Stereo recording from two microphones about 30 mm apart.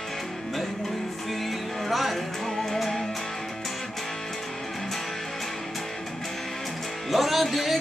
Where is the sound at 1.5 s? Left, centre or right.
Centre.